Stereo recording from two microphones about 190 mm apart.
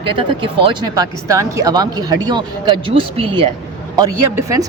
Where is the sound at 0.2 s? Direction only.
25° right (ahead or behind).